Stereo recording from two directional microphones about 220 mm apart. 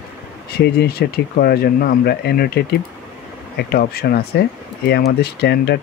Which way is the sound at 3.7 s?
45° left (ahead or behind).